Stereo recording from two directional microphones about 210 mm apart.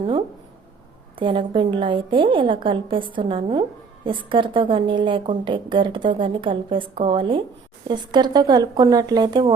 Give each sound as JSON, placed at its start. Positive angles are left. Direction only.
{"t": 1.1, "sound": "a woman's voice", "side_deg": -25}